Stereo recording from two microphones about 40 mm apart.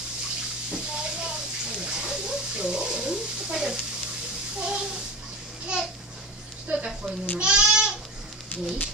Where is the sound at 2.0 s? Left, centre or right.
Centre.